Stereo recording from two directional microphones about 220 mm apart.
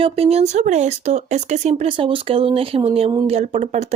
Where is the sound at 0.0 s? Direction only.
25° right (ahead or behind).